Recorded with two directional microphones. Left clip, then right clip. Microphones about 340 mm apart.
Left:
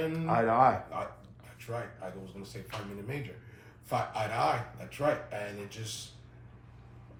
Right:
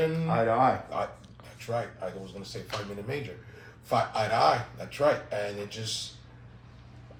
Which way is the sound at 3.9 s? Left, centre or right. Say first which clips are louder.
Right 6 dB; centre.